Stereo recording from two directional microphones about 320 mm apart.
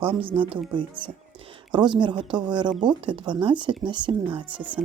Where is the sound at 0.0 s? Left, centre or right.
Centre.